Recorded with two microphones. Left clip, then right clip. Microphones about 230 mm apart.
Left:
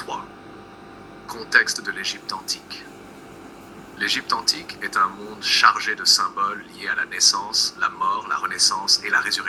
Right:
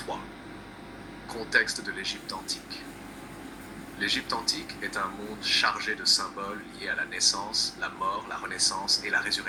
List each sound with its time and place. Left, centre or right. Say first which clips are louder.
1.3 s speech: left 7 dB; left
4.0 s speech: left 7 dB; left